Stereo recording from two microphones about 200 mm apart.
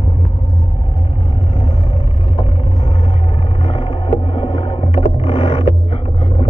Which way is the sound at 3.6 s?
30° left (ahead or behind).